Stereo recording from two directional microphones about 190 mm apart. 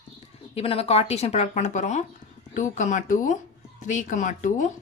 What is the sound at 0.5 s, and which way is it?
A woman's voice, 30° left (ahead or behind).